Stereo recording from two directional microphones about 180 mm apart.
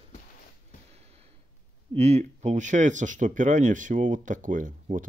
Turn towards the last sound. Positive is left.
turn(degrees=-45)  # may be behind; listen again after turning